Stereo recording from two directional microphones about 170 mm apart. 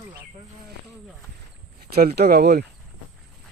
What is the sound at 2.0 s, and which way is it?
Speech, 65° right (ahead or behind).